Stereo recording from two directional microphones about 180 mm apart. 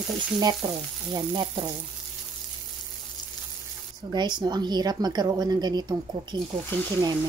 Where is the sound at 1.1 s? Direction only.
25° right (ahead or behind).